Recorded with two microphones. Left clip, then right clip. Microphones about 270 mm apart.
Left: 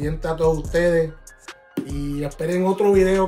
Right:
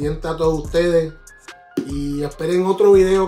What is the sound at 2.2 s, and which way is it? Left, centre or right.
Speech, centre.